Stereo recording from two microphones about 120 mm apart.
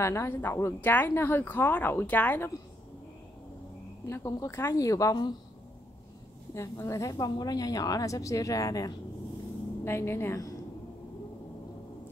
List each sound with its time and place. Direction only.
0.0 s a woman's voice: 20° left (ahead or behind)
4.1 s a woman's voice: 25° left (ahead or behind)
6.5 s a woman's voice: 25° left (ahead or behind)